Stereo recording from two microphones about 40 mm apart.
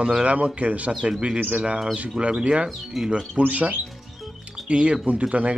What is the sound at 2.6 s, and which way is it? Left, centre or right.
Speech, centre.